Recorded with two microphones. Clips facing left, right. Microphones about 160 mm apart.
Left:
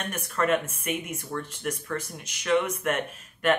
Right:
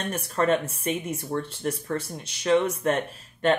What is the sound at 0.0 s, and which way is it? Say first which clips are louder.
Speech: right 3 dB; 30° right (ahead or behind).